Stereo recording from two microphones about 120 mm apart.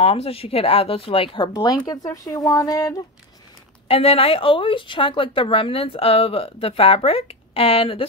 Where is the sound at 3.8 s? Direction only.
55° left (ahead or behind).